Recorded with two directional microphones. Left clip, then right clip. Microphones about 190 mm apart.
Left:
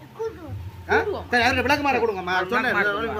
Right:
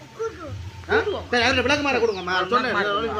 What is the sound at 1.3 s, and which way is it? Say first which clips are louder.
Speech: even; 25° left (ahead or behind).